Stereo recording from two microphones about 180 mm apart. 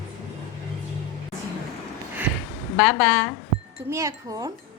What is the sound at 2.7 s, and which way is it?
Speech, centre (ahead or behind).